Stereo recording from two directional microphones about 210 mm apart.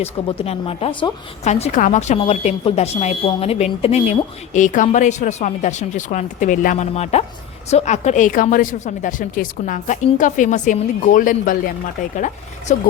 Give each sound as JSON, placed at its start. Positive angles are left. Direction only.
{"t": 0.0, "sound": "a woman's voice", "side_deg": 30}